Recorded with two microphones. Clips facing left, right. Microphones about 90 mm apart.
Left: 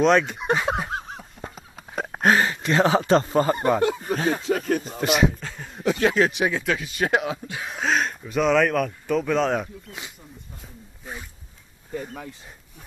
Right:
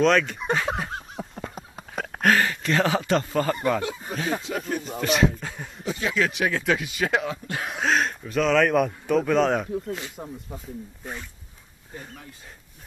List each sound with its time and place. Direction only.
0.0 s speech: 15° left (ahead or behind)
0.5 s a sound: 10° left (ahead or behind)
1.4 s a sound: 60° right (ahead or behind)
2.0 s speech: 20° left (ahead or behind)
4.1 s speech: 40° left (ahead or behind)
5.0 s speech: 10° left (ahead or behind)
5.4 s a sound: 5° right (ahead or behind)
5.8 s speech: 65° left (ahead or behind)
6.1 s speech: 30° left (ahead or behind)
6.4 s speech: 10° left (ahead or behind)
7.7 s a sound: centre (ahead or behind)
8.7 s speech: 5° right (ahead or behind)
10.1 s speech: 70° right (ahead or behind)